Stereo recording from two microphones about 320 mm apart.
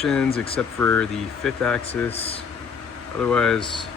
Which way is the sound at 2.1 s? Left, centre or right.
Centre.